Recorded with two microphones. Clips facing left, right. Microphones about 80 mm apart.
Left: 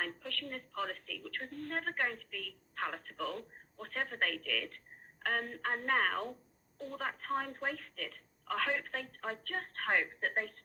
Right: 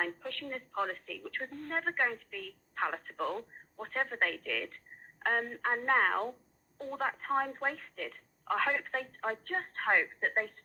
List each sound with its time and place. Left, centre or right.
0.0 s a woman's voice: right